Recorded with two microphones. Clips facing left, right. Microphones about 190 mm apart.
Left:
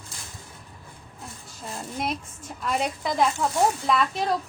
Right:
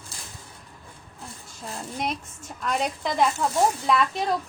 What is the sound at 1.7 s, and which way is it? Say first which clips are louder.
A woman's voice: even; centre (ahead or behind).